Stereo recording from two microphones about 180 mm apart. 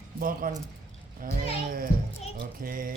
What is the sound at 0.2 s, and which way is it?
Speech, 50° right (ahead or behind).